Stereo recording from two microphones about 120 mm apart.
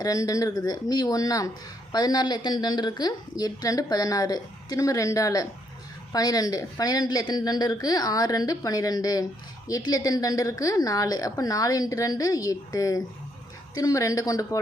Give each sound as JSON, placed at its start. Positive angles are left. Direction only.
{"t": 0.0, "sound": "a woman's voice", "side_deg": 30}